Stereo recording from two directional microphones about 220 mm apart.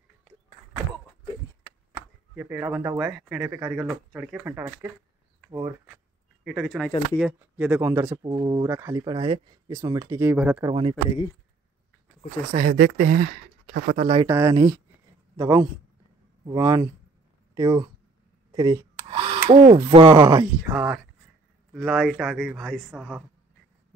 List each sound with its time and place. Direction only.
1.9 s a man's voice: 10° right (ahead or behind)
6.4 s a man's voice: centre (ahead or behind)
10.7 s speech: 25° right (ahead or behind)
12.5 s speech: 40° right (ahead or behind)
13.9 s speech: 25° right (ahead or behind)
18.5 s a sound: 15° right (ahead or behind)
19.5 s speech: 20° right (ahead or behind)
20.2 s a man's voice: 15° right (ahead or behind)